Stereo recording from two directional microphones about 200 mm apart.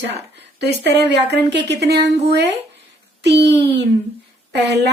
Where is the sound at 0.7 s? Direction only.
55° right (ahead or behind).